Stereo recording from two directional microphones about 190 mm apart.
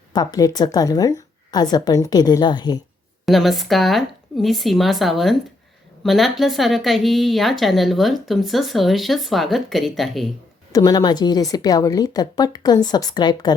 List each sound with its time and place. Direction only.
0.1 s a woman's voice: 20° left (ahead or behind)
3.2 s a woman's voice: centre (ahead or behind)
10.7 s a woman's voice: 20° left (ahead or behind)